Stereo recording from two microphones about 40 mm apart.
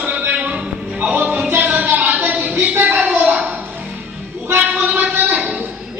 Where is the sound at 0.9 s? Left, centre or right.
Right.